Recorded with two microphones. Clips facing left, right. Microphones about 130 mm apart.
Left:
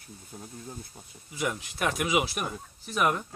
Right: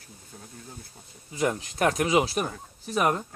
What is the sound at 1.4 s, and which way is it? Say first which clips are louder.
Speech: right 5 dB; 45° right (ahead or behind).